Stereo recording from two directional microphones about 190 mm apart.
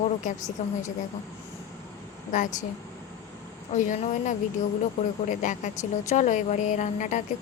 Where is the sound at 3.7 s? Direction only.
40° left (ahead or behind).